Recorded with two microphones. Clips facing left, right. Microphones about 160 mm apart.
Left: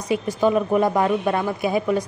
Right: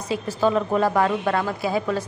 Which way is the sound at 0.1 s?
15° left (ahead or behind).